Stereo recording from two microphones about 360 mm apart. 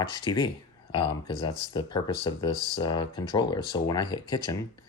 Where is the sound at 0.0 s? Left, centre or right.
Centre.